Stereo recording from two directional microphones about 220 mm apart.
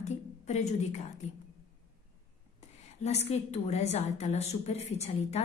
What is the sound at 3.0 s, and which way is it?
A woman's voice, 30° left (ahead or behind).